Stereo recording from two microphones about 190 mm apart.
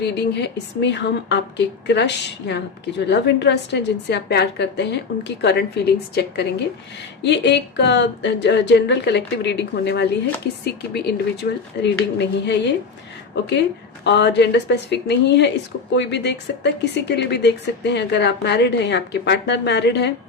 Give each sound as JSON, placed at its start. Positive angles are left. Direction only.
{"t": 0.0, "sound": "speech", "side_deg": 65}
{"t": 14.0, "sound": "speech", "side_deg": 65}